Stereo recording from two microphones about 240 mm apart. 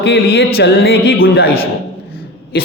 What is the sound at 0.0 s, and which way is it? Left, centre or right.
A man's voice, left.